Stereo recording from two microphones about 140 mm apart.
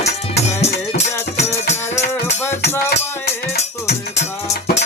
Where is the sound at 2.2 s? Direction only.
15° left (ahead or behind).